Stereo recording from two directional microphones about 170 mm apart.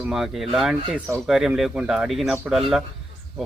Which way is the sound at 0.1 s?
Centre (ahead or behind).